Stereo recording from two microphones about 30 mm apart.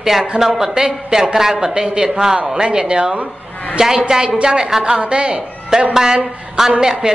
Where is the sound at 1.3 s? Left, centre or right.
Centre.